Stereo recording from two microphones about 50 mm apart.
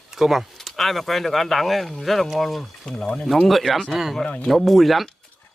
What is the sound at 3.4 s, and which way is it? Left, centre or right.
Speech, centre.